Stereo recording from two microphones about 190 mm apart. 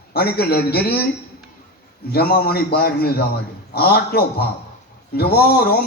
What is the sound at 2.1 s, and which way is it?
Speech, 55° left (ahead or behind).